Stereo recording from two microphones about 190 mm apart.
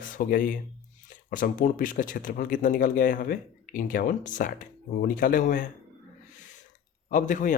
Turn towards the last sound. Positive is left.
turn(degrees=40)  # may be behind; listen again after turning